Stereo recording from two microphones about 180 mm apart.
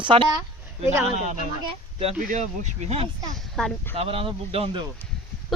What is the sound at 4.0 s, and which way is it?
Speech, 30° right (ahead or behind).